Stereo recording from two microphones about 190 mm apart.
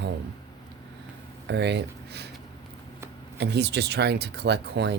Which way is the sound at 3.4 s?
60° right (ahead or behind).